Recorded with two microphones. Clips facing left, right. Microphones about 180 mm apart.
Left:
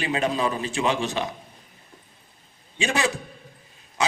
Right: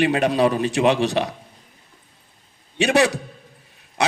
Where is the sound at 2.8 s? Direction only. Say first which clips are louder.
Right 7 dB; 70° right (ahead or behind).